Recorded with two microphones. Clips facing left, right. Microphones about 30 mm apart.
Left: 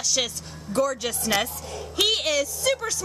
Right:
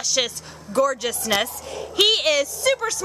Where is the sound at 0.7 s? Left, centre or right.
Centre.